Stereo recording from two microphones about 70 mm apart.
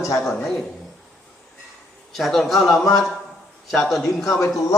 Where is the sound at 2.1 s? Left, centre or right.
Centre.